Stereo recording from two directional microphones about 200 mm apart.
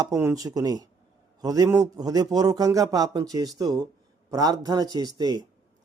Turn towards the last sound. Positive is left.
turn(degrees=-20)  # may be behind; listen again after turning